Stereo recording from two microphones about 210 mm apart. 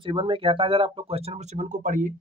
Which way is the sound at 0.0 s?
25° right (ahead or behind).